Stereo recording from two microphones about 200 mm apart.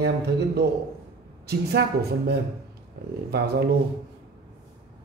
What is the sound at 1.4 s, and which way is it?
Speech, 50° right (ahead or behind).